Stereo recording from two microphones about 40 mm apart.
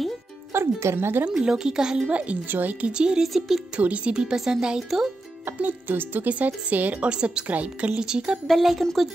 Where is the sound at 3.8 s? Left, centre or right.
Right.